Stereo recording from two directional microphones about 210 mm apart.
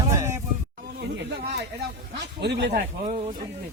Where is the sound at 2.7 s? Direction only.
35° right (ahead or behind).